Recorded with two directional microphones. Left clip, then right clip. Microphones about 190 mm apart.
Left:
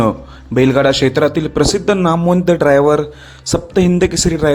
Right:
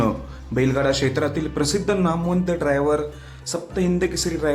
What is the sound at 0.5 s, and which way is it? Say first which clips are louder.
A man's voice: left 9 dB; 40° left (ahead or behind).